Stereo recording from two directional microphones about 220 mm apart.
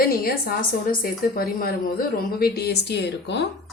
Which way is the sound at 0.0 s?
45° left (ahead or behind).